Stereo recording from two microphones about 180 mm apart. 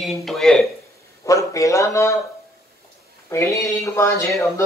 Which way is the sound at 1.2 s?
20° left (ahead or behind).